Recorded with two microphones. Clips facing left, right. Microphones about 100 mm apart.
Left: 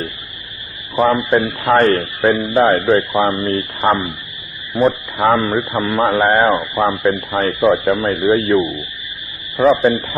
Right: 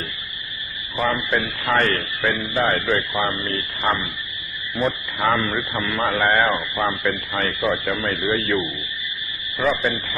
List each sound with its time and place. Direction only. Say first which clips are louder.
0.9 s a man's voice: left 8 dB; 35° left (ahead or behind)
9.6 s a man's voice: left 9 dB; 30° left (ahead or behind)